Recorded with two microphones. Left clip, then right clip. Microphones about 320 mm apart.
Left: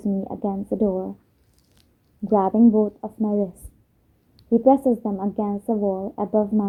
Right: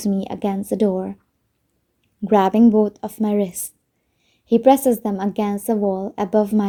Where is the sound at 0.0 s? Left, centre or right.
Right.